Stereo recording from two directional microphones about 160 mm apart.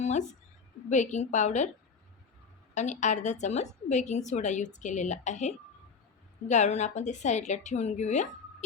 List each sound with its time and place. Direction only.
0.0 s a sound: 45° left (ahead or behind)
0.9 s a woman's voice: 45° left (ahead or behind)
2.7 s a woman's voice: 45° left (ahead or behind)